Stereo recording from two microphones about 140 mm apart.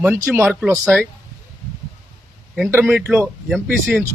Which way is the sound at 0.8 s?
Centre (ahead or behind).